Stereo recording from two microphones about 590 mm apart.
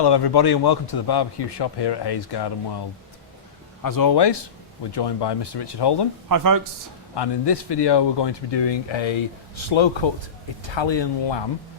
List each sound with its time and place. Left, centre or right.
0.0 s a man's voice: left
3.8 s a man's voice: left
6.2 s speech: right
7.2 s speech: left